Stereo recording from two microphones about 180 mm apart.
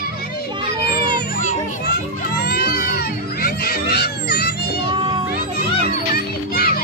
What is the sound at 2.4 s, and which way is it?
Music, 60° left (ahead or behind).